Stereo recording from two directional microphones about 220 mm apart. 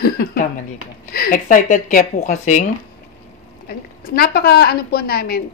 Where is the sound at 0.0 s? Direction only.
40° left (ahead or behind).